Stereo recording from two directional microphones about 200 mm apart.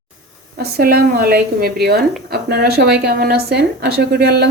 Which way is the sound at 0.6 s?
50° right (ahead or behind).